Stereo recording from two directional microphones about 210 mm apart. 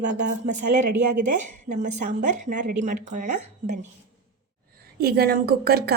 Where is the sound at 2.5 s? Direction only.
40° right (ahead or behind).